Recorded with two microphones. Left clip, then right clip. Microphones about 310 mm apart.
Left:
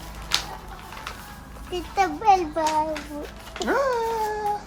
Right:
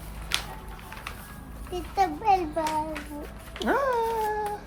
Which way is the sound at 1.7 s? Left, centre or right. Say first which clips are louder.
Left 2 dB; left.